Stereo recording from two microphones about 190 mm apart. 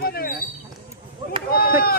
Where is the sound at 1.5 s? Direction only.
50° left (ahead or behind).